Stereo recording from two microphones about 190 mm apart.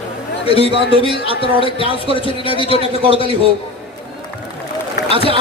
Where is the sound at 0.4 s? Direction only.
30° left (ahead or behind).